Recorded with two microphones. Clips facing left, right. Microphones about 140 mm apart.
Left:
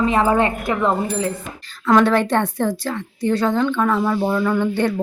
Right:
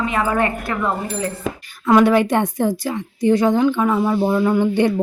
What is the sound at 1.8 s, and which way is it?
A woman's voice, 10° right (ahead or behind).